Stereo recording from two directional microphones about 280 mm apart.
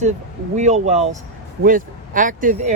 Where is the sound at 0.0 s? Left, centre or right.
Right.